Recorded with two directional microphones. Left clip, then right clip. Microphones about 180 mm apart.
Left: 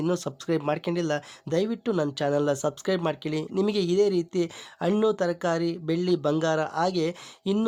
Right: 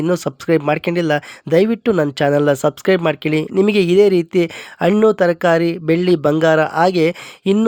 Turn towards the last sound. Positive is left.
turn(degrees=-30)  # may be behind; listen again after turning